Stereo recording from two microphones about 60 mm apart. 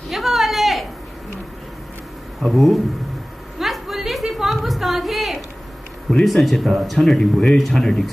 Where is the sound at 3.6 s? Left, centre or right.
Centre.